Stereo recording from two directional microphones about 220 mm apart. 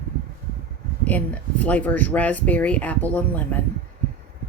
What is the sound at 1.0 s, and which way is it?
Speech, 5° left (ahead or behind).